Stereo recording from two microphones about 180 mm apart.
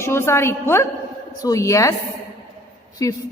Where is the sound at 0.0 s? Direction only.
15° left (ahead or behind).